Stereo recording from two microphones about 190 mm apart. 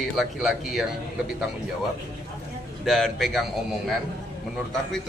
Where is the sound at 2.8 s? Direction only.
Centre (ahead or behind).